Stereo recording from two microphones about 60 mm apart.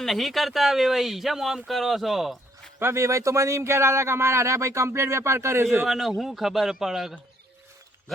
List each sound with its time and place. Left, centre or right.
0.0 s speech: centre
2.8 s speech: right
5.8 s speech: centre